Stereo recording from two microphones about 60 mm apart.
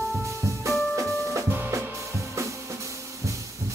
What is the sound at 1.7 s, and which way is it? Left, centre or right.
Drum kit, right.